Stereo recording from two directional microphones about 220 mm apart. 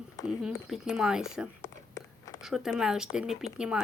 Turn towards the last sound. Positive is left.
turn(degrees=-5)  # may be behind; listen again after turning